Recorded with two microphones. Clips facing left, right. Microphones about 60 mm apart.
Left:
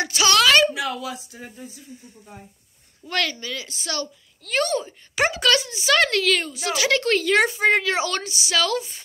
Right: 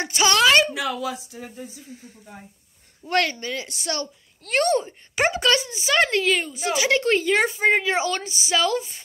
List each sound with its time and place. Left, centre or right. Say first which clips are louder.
0.0 s a sound: even; right
3.1 s a woman's voice: right 3 dB; right
5.3 s a woman's voice: even; right